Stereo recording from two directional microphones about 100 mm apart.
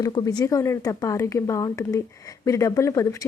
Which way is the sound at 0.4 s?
30° left (ahead or behind).